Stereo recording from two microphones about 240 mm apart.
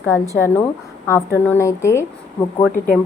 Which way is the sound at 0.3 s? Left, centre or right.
Centre.